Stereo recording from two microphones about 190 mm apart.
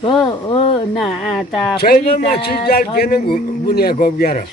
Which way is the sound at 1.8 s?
50° left (ahead or behind).